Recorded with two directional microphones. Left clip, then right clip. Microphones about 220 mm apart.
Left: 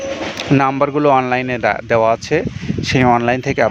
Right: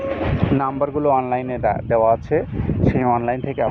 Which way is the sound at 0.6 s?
55° left (ahead or behind).